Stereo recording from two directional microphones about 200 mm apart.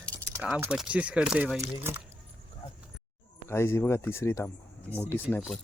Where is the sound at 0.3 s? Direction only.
10° right (ahead or behind).